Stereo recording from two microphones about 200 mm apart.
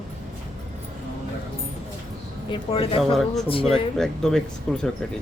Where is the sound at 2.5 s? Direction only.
25° left (ahead or behind).